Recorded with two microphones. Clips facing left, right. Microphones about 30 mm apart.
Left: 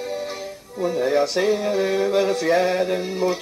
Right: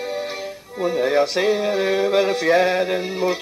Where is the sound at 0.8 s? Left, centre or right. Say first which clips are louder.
Right 1 dB; centre.